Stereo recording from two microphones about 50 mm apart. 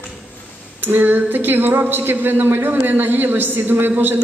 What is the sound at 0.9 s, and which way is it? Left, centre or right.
A woman's voice, right.